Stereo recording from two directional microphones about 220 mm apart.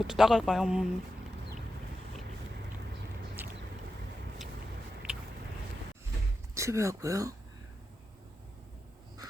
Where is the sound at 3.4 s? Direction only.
10° right (ahead or behind).